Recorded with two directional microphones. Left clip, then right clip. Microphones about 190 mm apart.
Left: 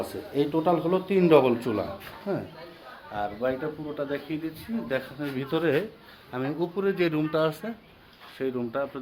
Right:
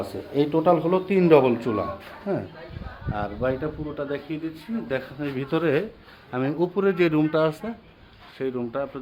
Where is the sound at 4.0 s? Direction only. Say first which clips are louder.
Right 1 dB; 15° right (ahead or behind).